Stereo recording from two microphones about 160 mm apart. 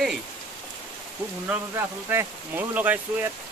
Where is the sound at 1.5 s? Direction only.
15° right (ahead or behind).